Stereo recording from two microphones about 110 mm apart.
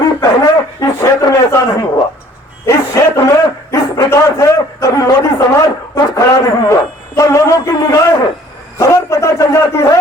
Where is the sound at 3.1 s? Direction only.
30° left (ahead or behind).